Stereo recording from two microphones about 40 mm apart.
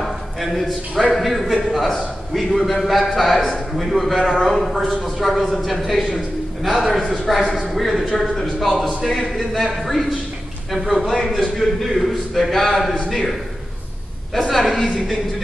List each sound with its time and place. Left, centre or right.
0.0 s a sound: centre
1.2 s a man's voice: centre
4.2 s a man's voice: centre
4.5 s a man's voice: centre
14.5 s a man's voice: centre